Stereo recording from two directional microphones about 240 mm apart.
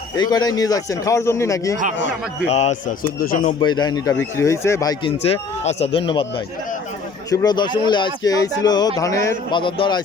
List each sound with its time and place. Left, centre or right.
0.2 s speech: centre
2.5 s speech: left
3.6 s speech: centre